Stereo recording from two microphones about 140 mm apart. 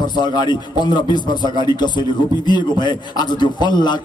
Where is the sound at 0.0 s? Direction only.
30° left (ahead or behind).